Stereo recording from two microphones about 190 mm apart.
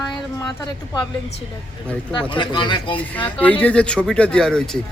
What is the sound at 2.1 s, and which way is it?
Speech, 25° left (ahead or behind).